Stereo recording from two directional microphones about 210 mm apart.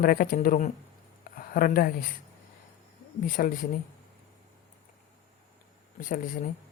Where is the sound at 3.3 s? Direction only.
40° left (ahead or behind).